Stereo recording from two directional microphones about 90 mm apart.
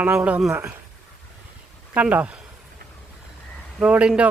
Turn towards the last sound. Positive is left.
turn(degrees=-15)  # may be behind; listen again after turning